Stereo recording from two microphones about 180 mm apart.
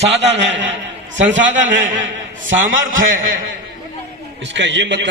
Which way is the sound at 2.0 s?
90° right.